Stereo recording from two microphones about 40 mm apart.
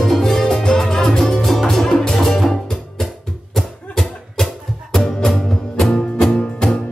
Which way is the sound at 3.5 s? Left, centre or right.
Centre.